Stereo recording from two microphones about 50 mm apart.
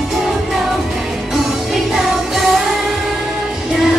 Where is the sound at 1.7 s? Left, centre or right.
Centre.